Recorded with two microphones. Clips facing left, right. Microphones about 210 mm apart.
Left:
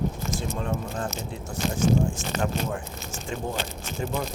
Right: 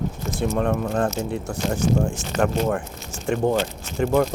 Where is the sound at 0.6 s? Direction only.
65° right (ahead or behind).